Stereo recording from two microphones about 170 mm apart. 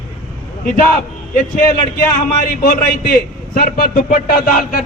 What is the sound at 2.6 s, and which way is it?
A man's voice, 55° left (ahead or behind).